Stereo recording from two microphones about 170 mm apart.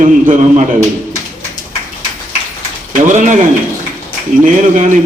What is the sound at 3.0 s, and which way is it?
Speech, 45° right (ahead or behind).